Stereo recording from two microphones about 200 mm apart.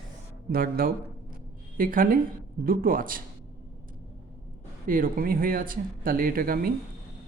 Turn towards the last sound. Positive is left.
turn(degrees=-45)  # may be behind; listen again after turning